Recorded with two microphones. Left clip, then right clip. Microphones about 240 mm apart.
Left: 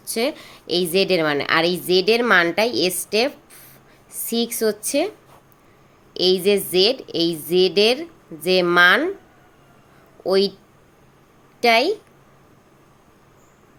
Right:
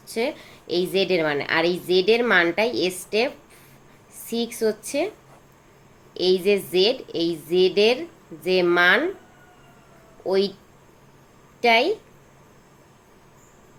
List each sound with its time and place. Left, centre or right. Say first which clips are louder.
0.0 s a woman's voice: left 3 dB; left
6.1 s a woman's voice: left 2 dB; left
10.2 s a woman's voice: left 3 dB; left
11.6 s a woman's voice: left 2 dB; left